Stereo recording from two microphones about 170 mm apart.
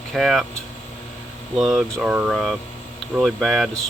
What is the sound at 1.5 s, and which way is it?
Speech, centre (ahead or behind).